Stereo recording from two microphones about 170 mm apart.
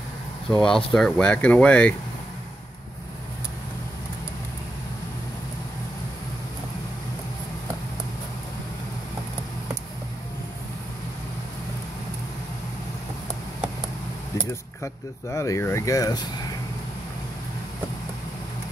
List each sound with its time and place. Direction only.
0.5 s speech: 5° left (ahead or behind)
14.5 s speech: 15° left (ahead or behind)